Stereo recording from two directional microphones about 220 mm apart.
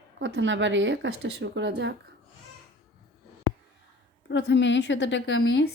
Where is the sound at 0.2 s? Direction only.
55° right (ahead or behind).